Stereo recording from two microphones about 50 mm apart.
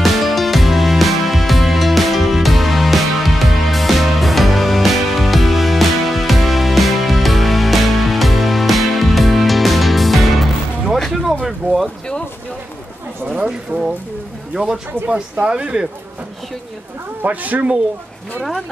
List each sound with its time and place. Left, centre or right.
0.0 s music: centre
11.4 s boat: centre
13.3 s clip-clop: centre
14.5 s speech: centre
17.2 s speech: right